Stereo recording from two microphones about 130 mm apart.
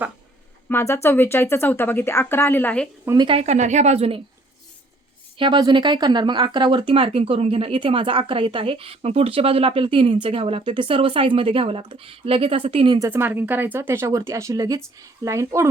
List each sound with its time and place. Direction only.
0.7 s a woman's voice: 20° left (ahead or behind)
3.2 s speech: 45° right (ahead or behind)
5.4 s speech: 35° right (ahead or behind)
13.0 s speech: 15° right (ahead or behind)